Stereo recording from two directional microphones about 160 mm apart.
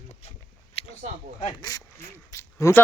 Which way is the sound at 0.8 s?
35° left (ahead or behind).